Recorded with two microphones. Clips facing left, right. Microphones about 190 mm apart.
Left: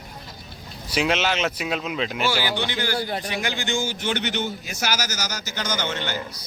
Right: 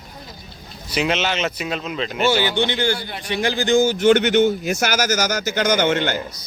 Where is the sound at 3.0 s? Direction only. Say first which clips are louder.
Left 5 dB; 40° left (ahead or behind).